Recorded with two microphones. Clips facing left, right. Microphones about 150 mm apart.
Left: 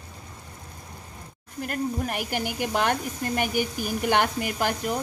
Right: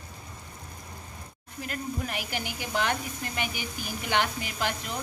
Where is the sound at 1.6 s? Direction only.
50° left (ahead or behind).